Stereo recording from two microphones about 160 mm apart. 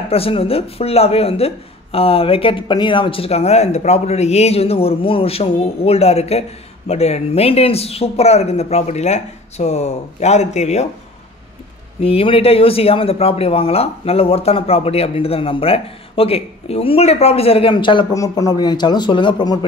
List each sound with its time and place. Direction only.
0.1 s speech: 35° left (ahead or behind)
12.0 s speech: 35° left (ahead or behind)